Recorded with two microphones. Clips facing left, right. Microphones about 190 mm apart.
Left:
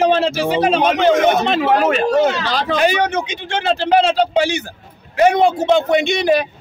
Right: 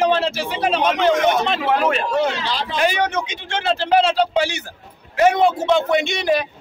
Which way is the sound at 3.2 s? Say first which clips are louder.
Left 3 dB; centre (ahead or behind).